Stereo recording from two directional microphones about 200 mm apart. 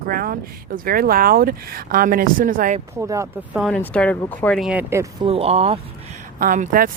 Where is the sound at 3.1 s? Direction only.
15° right (ahead or behind).